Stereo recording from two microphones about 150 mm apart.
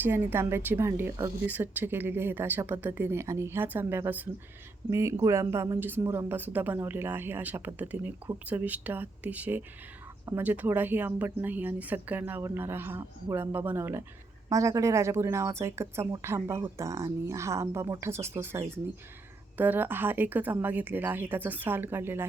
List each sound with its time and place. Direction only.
0.0 s a woman's voice: 15° right (ahead or behind)